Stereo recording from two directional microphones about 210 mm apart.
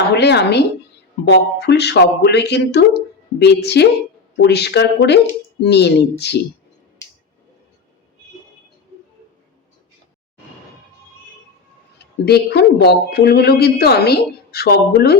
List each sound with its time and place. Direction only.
0.1 s a woman's voice: 50° left (ahead or behind)
12.2 s speech: 50° left (ahead or behind)